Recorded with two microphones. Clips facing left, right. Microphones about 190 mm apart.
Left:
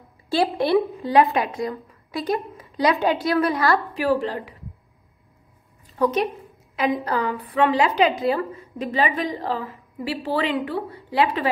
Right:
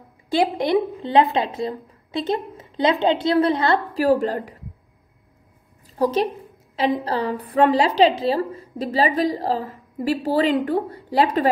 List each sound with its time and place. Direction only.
0.6 s a woman's voice: 15° right (ahead or behind)
3.9 s a woman's voice: 40° right (ahead or behind)
5.9 s a woman's voice: 30° right (ahead or behind)